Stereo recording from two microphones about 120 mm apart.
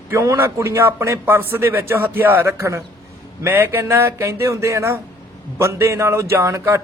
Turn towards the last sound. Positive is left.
turn(degrees=-25)  # may be behind; listen again after turning